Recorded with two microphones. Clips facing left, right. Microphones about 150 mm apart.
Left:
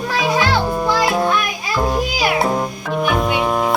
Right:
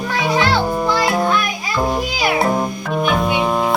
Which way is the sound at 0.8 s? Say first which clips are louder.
Left 1 dB; 5° left (ahead or behind).